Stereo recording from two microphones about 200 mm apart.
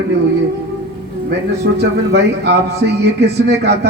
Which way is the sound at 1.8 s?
55° right (ahead or behind).